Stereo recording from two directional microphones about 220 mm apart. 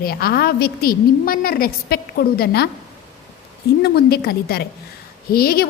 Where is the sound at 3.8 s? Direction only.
45° left (ahead or behind).